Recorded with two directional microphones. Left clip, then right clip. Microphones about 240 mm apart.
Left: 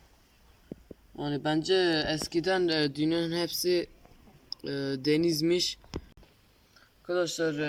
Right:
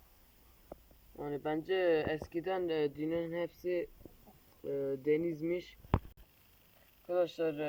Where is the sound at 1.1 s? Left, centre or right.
Centre.